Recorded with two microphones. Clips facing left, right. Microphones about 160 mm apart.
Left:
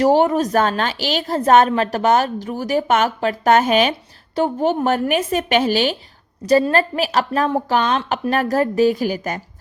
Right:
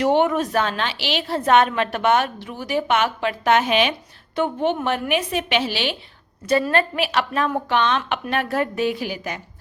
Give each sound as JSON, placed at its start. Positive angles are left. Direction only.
{"t": 0.0, "sound": "a woman's voice", "side_deg": 35}